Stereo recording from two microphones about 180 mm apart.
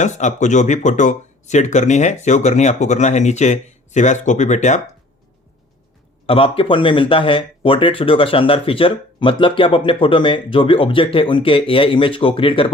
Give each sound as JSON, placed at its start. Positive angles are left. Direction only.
{"t": 0.0, "sound": "speech", "side_deg": 40}
{"t": 6.2, "sound": "speech", "side_deg": 30}